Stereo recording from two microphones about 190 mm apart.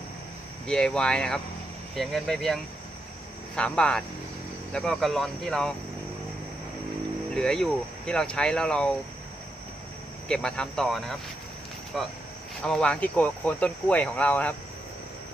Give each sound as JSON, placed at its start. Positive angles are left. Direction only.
{"t": 0.7, "sound": "speech", "side_deg": 5}
{"t": 7.3, "sound": "speech", "side_deg": 5}
{"t": 10.2, "sound": "speech", "side_deg": 5}